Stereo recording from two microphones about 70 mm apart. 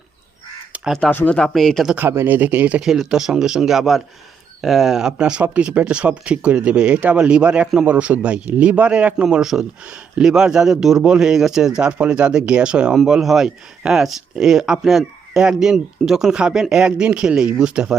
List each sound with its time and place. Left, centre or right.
1.0 s speech: centre
2.0 s a man's voice: right
2.8 s a man's voice: centre
11.8 s speech: centre